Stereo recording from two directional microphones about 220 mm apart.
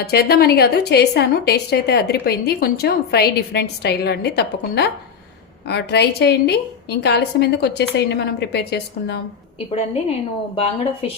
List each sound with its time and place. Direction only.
0.0 s a woman's voice: 45° left (ahead or behind)
10.5 s a woman's voice: 25° left (ahead or behind)